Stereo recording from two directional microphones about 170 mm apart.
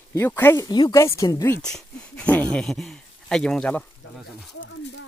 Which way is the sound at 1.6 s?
5° left (ahead or behind).